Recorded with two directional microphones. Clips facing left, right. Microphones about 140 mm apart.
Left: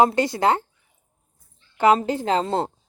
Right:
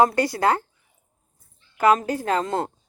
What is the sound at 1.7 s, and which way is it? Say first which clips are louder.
Speech: left 1 dB; 25° left (ahead or behind).